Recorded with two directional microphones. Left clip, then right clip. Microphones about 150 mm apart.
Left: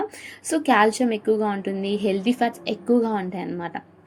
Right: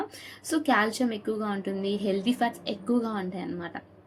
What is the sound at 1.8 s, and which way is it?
Speech, 30° right (ahead or behind).